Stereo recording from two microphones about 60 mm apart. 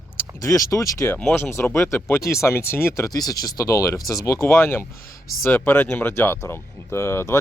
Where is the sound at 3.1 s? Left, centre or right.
Left.